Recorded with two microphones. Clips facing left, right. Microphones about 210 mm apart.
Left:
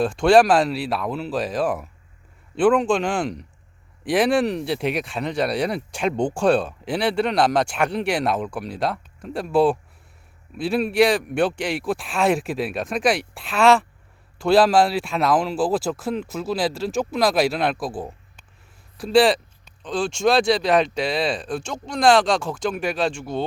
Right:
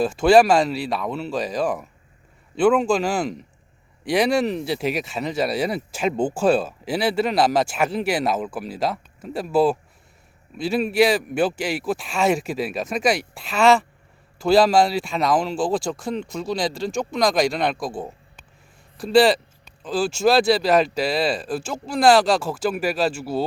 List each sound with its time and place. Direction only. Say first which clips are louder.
0.0 s speech: even; centre (ahead or behind)